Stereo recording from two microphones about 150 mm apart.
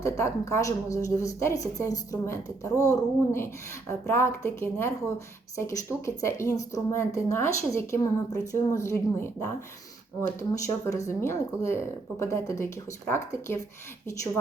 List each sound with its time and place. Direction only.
0.0 s a woman's voice: 20° left (ahead or behind)
10.7 s a woman's voice: 20° left (ahead or behind)